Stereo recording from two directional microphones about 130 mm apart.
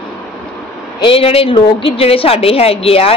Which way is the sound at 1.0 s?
45° left (ahead or behind).